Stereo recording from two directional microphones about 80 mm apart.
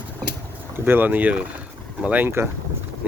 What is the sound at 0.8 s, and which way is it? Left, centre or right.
Speech, right.